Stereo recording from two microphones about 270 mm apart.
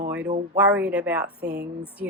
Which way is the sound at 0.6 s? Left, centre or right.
Centre.